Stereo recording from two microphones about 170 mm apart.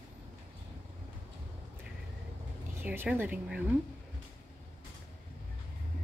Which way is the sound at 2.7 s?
10° right (ahead or behind).